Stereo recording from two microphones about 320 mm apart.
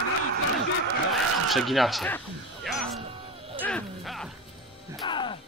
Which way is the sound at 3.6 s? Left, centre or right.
Centre.